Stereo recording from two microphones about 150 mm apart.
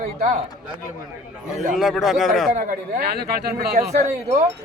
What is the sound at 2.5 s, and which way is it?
Speech, 65° right (ahead or behind).